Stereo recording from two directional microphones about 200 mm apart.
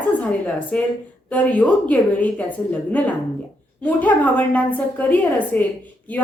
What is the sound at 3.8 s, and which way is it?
A woman's voice, 10° left (ahead or behind).